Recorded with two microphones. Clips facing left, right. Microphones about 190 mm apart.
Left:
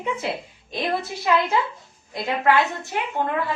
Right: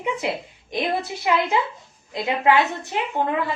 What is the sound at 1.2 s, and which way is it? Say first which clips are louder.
A woman's voice: even; 15° right (ahead or behind).